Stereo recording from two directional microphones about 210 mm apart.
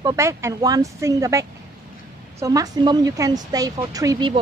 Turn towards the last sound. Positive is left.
turn(degrees=-20)  # may be behind; listen again after turning